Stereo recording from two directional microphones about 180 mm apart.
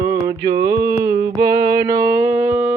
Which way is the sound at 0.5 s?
15° right (ahead or behind).